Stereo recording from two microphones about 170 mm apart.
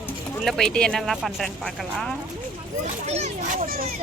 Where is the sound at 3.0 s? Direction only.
40° right (ahead or behind).